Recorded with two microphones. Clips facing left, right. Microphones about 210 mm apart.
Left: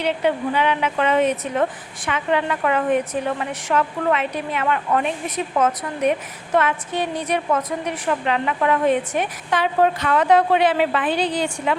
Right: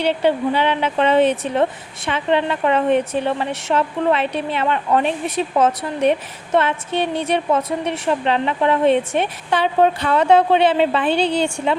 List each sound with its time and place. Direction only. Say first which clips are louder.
0.0 s a woman's voice: right 3 dB; 30° right (ahead or behind)